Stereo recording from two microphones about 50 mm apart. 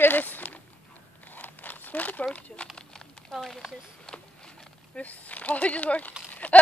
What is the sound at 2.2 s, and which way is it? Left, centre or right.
Speech, left.